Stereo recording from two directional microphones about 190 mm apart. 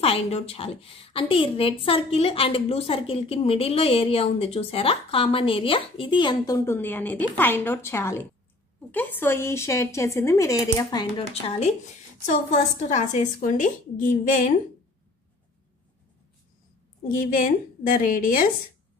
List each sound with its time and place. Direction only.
0.0 s a woman's voice: 30° left (ahead or behind)
12.3 s a woman's voice: 40° left (ahead or behind)
17.1 s a woman's voice: 45° left (ahead or behind)